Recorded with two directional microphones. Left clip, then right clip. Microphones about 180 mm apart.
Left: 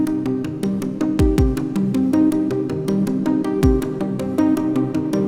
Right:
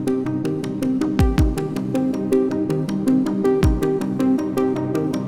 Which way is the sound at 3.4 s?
Centre (ahead or behind).